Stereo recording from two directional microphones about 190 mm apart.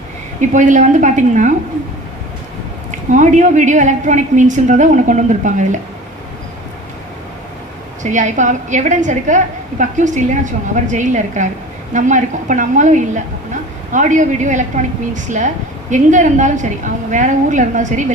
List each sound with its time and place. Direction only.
0.5 s a woman's voice: 40° right (ahead or behind)
3.1 s a woman's voice: 40° right (ahead or behind)
8.0 s a woman's voice: 40° right (ahead or behind)